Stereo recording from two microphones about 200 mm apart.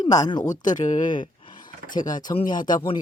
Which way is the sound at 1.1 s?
20° left (ahead or behind).